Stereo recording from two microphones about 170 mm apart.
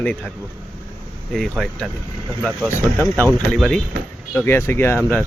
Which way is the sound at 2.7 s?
15° right (ahead or behind).